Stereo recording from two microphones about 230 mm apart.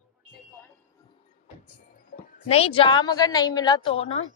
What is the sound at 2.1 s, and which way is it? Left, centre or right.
Music, left.